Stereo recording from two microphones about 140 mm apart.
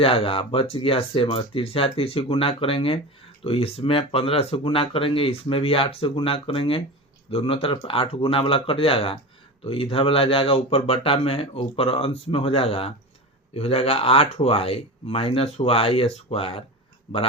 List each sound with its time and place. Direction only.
0.0 s speech: 40° left (ahead or behind)